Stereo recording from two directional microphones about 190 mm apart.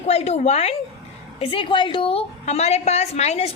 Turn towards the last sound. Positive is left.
turn(degrees=35)  # may be behind; listen again after turning